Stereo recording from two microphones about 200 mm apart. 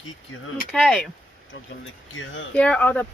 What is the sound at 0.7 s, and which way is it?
Speech, centre (ahead or behind).